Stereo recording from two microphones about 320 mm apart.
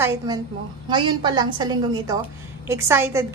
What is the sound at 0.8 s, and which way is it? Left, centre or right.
A woman's voice, centre.